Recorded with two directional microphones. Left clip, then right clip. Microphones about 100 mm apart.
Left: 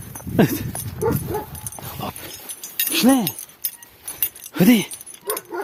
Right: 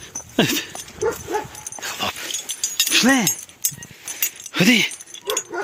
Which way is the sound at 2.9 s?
50° left (ahead or behind).